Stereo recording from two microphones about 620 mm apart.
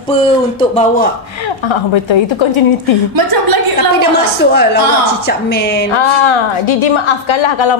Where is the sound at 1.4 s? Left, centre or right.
Left.